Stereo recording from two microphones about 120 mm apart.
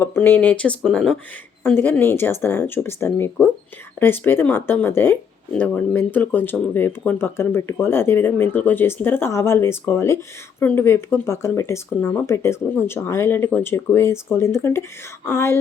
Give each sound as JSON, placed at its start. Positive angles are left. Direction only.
{"t": 0.0, "sound": "speech", "side_deg": 20}
{"t": 1.6, "sound": "speech", "side_deg": 15}